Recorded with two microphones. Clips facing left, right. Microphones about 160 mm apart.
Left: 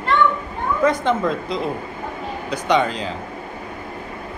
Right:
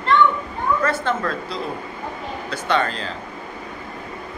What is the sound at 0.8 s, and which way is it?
Speech, 15° left (ahead or behind).